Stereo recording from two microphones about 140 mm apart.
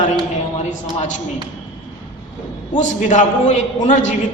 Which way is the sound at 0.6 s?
55° left (ahead or behind).